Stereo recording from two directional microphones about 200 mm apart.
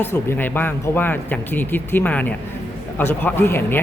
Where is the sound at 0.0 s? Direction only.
10° left (ahead or behind).